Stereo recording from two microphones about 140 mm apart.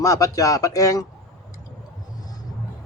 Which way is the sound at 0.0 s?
25° left (ahead or behind).